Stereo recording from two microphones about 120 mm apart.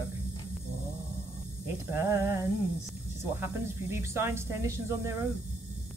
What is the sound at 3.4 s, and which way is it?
Speech, 20° right (ahead or behind).